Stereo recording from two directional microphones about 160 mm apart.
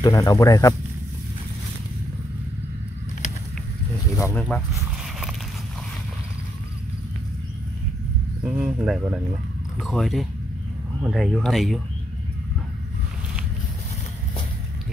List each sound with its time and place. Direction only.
0.0 s speech: 25° left (ahead or behind)
4.4 s speech: centre (ahead or behind)
8.4 s speech: 5° right (ahead or behind)